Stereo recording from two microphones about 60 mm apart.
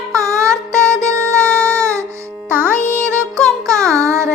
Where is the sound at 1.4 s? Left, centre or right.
Centre.